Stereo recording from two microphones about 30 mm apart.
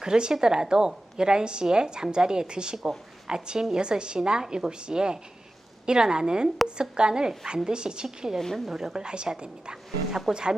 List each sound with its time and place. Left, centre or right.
0.0 s a woman's voice: right